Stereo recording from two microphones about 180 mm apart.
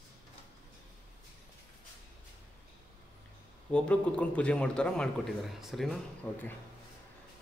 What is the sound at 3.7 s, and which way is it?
A man's voice, 5° left (ahead or behind).